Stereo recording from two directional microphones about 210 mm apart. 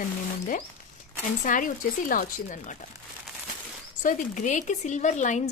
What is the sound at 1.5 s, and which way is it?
Speech, 40° left (ahead or behind).